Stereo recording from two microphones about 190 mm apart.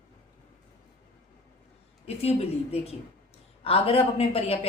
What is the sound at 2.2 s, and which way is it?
A woman's voice, 30° left (ahead or behind).